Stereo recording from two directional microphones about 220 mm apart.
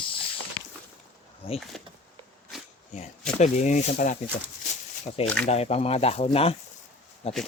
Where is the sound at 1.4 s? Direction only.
25° left (ahead or behind).